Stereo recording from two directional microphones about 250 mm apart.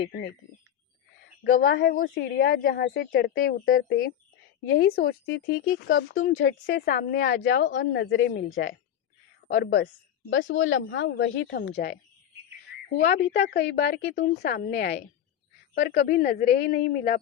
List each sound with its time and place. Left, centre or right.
0.0 s a woman's voice: left
1.5 s a woman's voice: left
6.7 s a woman's voice: left
9.5 s a woman's voice: left
13.0 s a woman's voice: left